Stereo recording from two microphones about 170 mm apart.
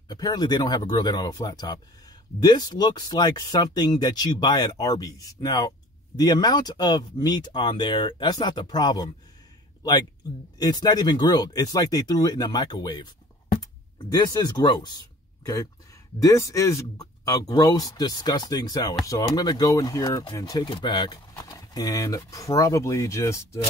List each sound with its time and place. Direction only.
0.1 s speech: 20° left (ahead or behind)
10.6 s speech: 25° left (ahead or behind)